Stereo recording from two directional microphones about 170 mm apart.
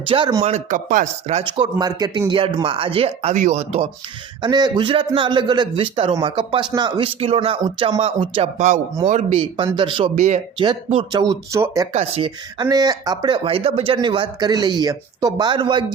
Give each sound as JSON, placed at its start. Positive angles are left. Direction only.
{"t": 0.1, "sound": "speech", "side_deg": -25}
{"t": 0.4, "sound": "speech", "side_deg": -45}
{"t": 1.5, "sound": "speech", "side_deg": -25}
{"t": 4.4, "sound": "speech", "side_deg": -25}
{"t": 9.7, "sound": "speech", "side_deg": -30}
{"t": 10.2, "sound": "speech", "side_deg": -40}
{"t": 11.1, "sound": "speech", "side_deg": -25}
{"t": 11.9, "sound": "speech", "side_deg": -30}